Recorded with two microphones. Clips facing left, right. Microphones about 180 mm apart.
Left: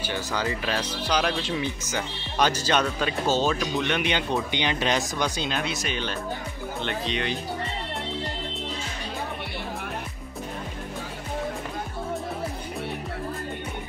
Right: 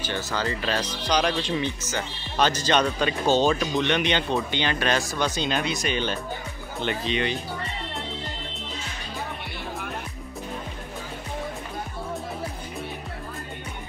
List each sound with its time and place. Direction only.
0.0 s speech: 10° left (ahead or behind)
5.5 s speech: centre (ahead or behind)